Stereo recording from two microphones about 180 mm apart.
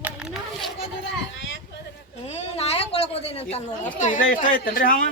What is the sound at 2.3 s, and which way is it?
Speech, 35° left (ahead or behind).